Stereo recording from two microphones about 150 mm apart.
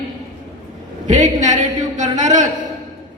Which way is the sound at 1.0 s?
55° right (ahead or behind).